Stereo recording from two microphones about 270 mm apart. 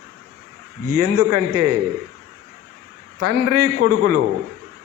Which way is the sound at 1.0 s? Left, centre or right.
Right.